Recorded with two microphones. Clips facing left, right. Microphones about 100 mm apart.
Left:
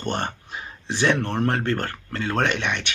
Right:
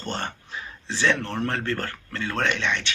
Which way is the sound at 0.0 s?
20° left (ahead or behind).